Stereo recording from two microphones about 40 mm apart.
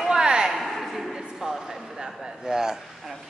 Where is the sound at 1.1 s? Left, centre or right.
Centre.